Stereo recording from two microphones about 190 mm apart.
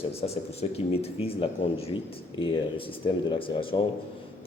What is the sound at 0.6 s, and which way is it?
Speech, 30° left (ahead or behind).